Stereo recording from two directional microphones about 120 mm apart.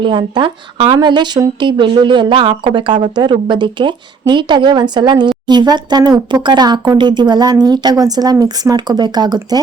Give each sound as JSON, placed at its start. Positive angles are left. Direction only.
{"t": 0.0, "sound": "speech", "side_deg": -45}